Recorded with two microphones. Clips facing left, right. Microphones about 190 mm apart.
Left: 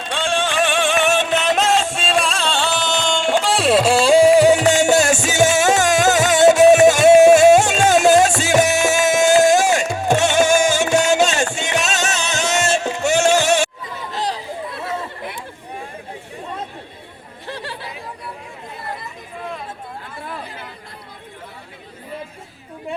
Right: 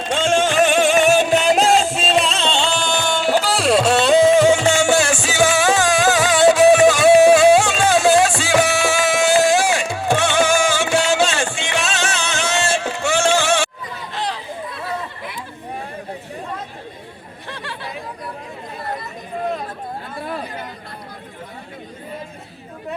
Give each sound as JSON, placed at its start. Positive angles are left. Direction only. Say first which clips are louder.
{"t": 0.4, "sound": "music", "louder": "right 3 dB", "side_deg": -40}
{"t": 2.1, "sound": "music", "louder": "right 1 dB", "side_deg": -20}
{"t": 3.9, "sound": "music", "louder": "left 2 dB", "side_deg": 30}
{"t": 14.1, "sound": "a sound", "louder": "left 2 dB", "side_deg": 35}
{"t": 17.5, "sound": "chatter", "louder": "left 2 dB", "side_deg": 35}